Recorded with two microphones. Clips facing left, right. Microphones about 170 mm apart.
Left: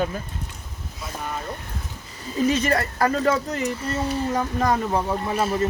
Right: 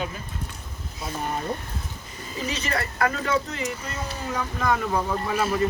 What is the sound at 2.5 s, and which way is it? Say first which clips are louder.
Speech: left 6 dB; 45° left (ahead or behind).